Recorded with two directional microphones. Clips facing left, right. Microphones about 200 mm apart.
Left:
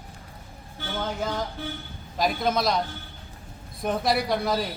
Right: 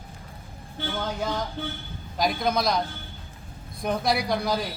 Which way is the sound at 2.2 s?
Centre (ahead or behind).